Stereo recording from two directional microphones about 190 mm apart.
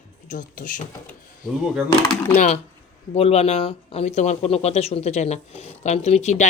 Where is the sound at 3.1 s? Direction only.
35° left (ahead or behind).